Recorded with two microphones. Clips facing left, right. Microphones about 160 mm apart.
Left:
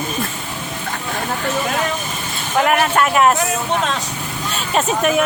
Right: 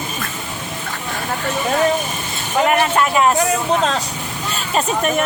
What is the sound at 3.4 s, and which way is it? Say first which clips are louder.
Speech: right 3 dB; 35° right (ahead or behind).